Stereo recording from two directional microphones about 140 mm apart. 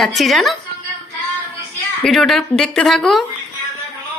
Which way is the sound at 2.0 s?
5° left (ahead or behind).